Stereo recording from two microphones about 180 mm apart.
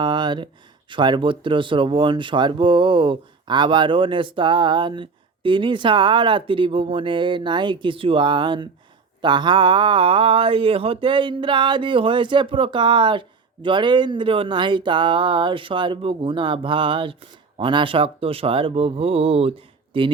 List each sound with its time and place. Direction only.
0.0 s speech: 25° right (ahead or behind)